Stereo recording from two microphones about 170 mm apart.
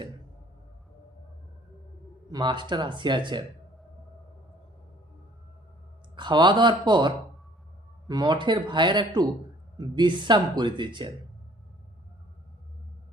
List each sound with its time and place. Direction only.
2.3 s speech: 25° right (ahead or behind)
6.1 s speech: 25° right (ahead or behind)